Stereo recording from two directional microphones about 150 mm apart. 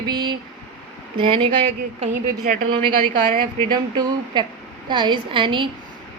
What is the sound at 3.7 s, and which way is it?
Speech, 30° right (ahead or behind).